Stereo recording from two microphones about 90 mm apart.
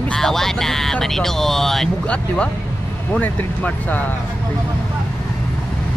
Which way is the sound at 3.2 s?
20° left (ahead or behind).